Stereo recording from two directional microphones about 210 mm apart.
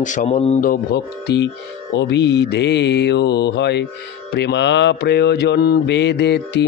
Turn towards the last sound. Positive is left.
turn(degrees=55)  # may be behind; listen again after turning